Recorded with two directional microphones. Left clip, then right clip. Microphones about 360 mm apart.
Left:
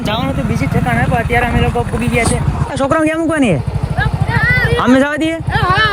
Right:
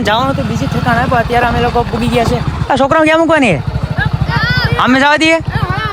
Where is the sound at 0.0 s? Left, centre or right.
Centre.